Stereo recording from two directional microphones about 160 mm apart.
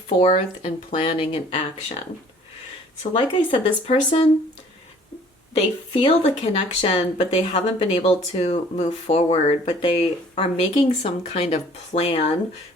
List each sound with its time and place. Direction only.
0.1 s speech: 40° left (ahead or behind)
3.0 s speech: 35° left (ahead or behind)
5.9 s speech: 35° left (ahead or behind)